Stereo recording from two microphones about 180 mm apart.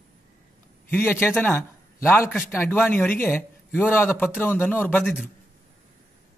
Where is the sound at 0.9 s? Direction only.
10° left (ahead or behind).